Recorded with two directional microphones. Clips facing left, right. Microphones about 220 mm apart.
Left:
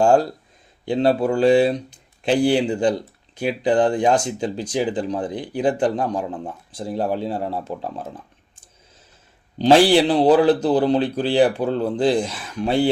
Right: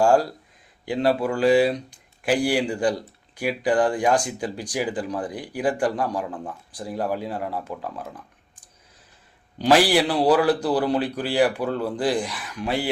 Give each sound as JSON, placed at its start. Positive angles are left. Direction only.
{"t": 0.0, "sound": "speech", "side_deg": 25}
{"t": 9.6, "sound": "speech", "side_deg": 25}